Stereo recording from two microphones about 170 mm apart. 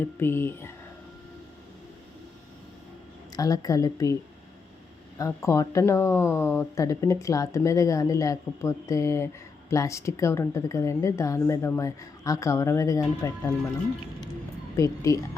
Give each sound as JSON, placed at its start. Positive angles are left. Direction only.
{"t": 0.0, "sound": "speech", "side_deg": 15}
{"t": 3.3, "sound": "a woman's voice", "side_deg": 20}
{"t": 14.8, "sound": "a woman's voice", "side_deg": 20}